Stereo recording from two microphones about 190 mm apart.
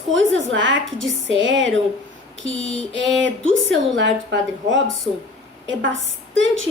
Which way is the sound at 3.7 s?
75° right (ahead or behind).